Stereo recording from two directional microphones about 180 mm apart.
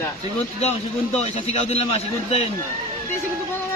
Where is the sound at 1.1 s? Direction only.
35° left (ahead or behind).